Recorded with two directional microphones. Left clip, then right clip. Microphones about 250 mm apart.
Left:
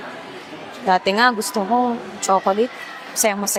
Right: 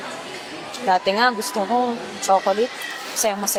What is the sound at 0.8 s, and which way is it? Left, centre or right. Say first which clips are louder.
Speech: left 2 dB; left.